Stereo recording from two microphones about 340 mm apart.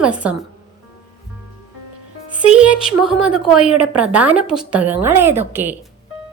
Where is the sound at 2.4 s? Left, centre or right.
Centre.